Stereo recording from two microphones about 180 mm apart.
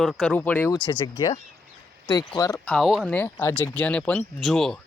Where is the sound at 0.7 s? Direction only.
25° left (ahead or behind).